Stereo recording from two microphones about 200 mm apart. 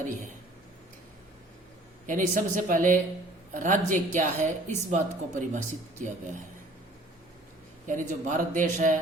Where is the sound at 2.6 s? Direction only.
40° right (ahead or behind).